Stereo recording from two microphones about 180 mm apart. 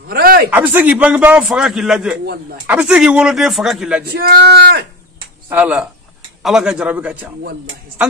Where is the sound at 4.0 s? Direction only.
60° right (ahead or behind).